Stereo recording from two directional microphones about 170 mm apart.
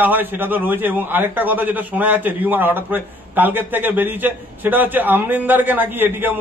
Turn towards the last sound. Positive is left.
turn(degrees=-10)  # may be behind; listen again after turning